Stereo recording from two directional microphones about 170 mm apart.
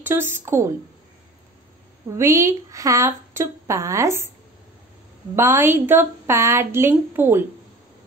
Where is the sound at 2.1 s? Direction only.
15° right (ahead or behind).